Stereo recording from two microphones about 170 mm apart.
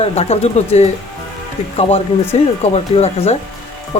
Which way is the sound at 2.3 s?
35° left (ahead or behind).